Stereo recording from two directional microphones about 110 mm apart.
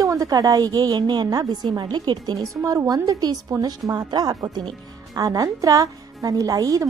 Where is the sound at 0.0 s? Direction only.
30° right (ahead or behind).